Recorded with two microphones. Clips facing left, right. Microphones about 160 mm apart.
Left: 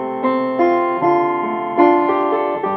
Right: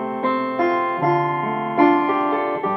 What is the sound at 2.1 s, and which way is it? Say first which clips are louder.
Music: left 4 dB; 35° left (ahead or behind).